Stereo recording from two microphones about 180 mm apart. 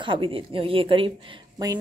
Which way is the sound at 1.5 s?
20° right (ahead or behind).